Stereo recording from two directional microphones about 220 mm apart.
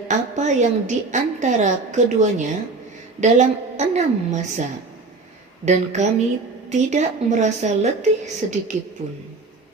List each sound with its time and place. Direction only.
0.1 s a woman's voice: 35° right (ahead or behind)
5.6 s a woman's voice: 30° right (ahead or behind)